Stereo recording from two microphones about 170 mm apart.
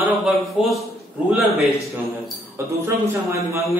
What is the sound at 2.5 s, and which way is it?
A man's voice, 15° right (ahead or behind).